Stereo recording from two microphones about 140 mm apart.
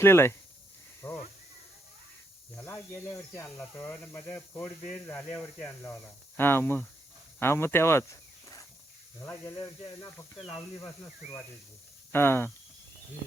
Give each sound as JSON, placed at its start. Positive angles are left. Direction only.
{"t": 0.0, "sound": "speech", "side_deg": 15}
{"t": 1.0, "sound": "a sound", "side_deg": 20}
{"t": 3.3, "sound": "speech", "side_deg": 15}
{"t": 10.8, "sound": "speech", "side_deg": 20}